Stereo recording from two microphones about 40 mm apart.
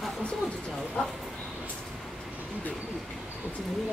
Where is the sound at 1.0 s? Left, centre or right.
Left.